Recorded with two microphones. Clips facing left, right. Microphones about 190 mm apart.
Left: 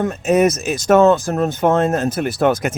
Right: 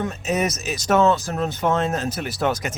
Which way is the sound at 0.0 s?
55° left (ahead or behind).